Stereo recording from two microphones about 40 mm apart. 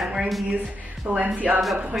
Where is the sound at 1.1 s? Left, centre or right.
Right.